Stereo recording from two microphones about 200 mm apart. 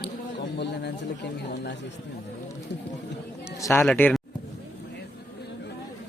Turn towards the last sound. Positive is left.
turn(degrees=5)  # may be behind; listen again after turning